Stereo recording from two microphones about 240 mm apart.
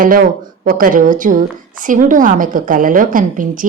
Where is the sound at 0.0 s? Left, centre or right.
Right.